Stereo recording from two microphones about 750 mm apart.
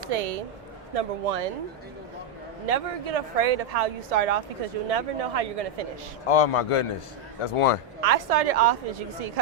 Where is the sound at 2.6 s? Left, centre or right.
Right.